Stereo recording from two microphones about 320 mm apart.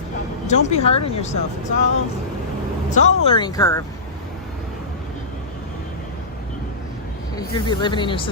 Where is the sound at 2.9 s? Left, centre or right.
Left.